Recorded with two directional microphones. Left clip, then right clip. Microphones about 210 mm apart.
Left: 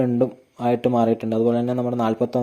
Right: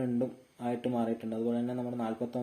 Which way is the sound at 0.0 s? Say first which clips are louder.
Left 13 dB; 40° left (ahead or behind).